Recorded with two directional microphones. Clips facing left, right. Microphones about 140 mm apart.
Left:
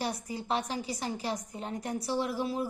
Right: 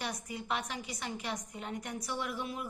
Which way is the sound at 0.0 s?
30° left (ahead or behind).